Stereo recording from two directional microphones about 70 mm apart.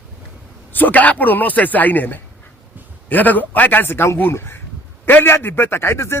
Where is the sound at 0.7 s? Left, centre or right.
Left.